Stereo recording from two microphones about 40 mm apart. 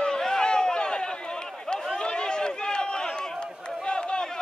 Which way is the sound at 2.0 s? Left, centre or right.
Left.